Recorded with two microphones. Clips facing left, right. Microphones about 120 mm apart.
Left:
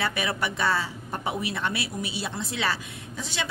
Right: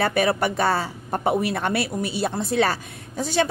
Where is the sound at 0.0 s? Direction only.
45° right (ahead or behind).